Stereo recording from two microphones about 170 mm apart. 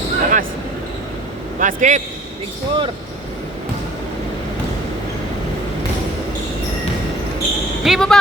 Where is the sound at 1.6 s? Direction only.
50° right (ahead or behind).